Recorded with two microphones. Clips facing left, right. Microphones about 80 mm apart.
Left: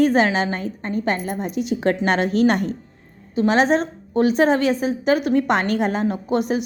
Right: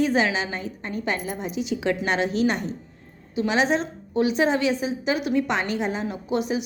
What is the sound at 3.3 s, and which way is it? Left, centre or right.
A woman's voice, left.